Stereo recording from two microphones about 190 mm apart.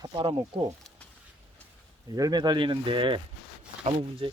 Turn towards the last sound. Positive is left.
turn(degrees=-30)  # may be behind; listen again after turning